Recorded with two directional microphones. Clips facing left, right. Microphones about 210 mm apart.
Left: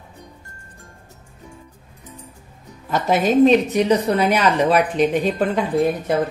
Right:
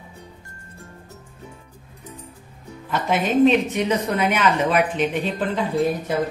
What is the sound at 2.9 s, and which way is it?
Speech, 40° left (ahead or behind).